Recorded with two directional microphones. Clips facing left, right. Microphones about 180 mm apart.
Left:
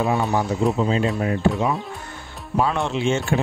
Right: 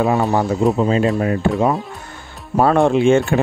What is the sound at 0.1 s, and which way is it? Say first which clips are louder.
Speech: right 4 dB; 50° right (ahead or behind).